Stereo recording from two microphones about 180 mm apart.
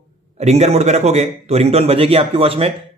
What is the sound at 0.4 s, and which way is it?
A man's voice, 40° right (ahead or behind).